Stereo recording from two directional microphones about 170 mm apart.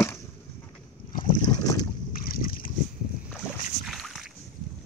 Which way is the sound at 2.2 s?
55° left (ahead or behind).